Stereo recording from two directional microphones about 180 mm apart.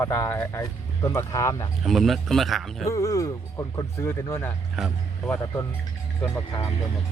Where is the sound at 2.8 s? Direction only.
15° left (ahead or behind).